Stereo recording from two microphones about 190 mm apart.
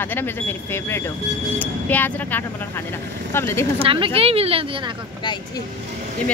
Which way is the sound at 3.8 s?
30° right (ahead or behind).